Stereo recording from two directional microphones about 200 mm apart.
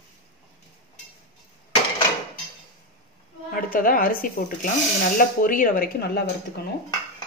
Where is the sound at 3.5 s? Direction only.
45° left (ahead or behind).